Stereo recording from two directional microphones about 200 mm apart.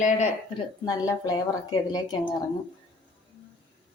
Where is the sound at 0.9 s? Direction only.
20° left (ahead or behind).